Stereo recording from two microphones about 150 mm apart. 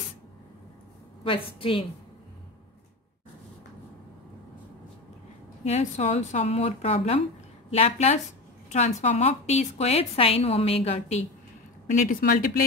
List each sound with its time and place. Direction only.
1.2 s a woman's voice: 35° left (ahead or behind)
5.7 s a woman's voice: 50° left (ahead or behind)
11.9 s speech: 60° left (ahead or behind)